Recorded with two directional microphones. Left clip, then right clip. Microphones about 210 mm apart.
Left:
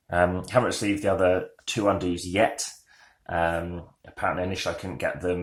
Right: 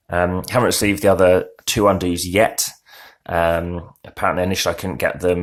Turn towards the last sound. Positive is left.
turn(degrees=-35)  # may be behind; listen again after turning